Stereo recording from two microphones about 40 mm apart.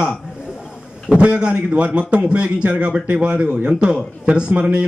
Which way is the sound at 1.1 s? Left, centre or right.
Right.